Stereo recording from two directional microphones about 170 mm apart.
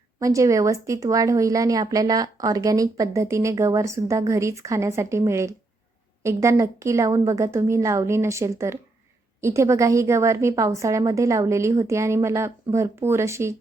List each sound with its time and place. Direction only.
0.2 s a woman's voice: 20° right (ahead or behind)